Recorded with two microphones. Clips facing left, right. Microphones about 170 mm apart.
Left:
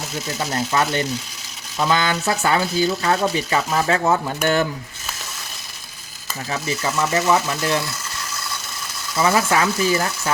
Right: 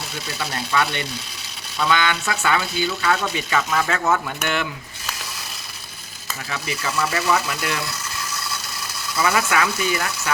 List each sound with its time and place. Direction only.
0.5 s speech: 40° left (ahead or behind)
6.5 s speech: 30° left (ahead or behind)
9.1 s speech: 25° left (ahead or behind)